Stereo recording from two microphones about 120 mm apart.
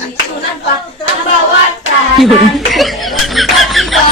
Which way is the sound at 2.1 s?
Centre (ahead or behind).